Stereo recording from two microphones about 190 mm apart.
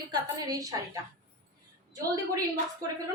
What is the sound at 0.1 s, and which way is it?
Speech, 20° right (ahead or behind).